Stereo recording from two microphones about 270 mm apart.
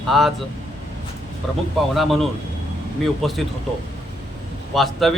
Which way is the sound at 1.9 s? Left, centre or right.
Centre.